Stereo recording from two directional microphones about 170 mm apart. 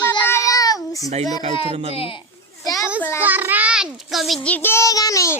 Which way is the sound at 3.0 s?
15° left (ahead or behind).